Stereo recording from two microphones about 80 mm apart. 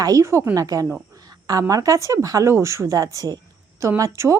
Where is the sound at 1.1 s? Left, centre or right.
Right.